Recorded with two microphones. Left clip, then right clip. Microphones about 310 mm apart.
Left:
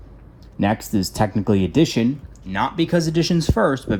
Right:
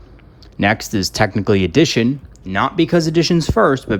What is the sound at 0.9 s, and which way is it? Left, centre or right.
Speech, left.